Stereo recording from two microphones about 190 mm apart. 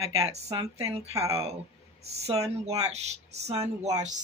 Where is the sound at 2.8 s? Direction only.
35° right (ahead or behind).